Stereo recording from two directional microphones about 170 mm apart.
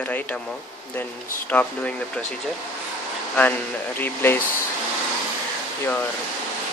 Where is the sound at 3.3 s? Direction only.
10° left (ahead or behind).